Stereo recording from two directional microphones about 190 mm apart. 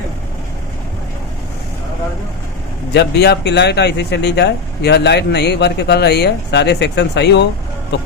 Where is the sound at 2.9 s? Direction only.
60° left (ahead or behind).